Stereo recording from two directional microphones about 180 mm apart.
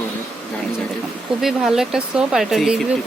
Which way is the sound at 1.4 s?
Centre (ahead or behind).